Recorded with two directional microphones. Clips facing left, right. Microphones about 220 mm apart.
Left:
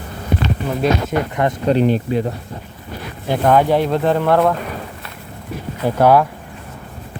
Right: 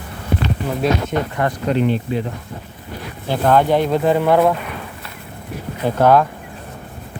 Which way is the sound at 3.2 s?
10° left (ahead or behind).